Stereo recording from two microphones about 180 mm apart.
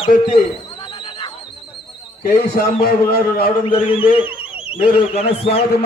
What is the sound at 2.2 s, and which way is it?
A man's voice, 60° left (ahead or behind).